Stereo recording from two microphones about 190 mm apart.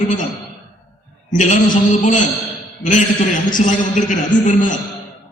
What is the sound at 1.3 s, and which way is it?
Speech, 40° left (ahead or behind).